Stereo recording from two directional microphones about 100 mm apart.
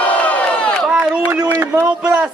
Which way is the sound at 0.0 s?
15° left (ahead or behind).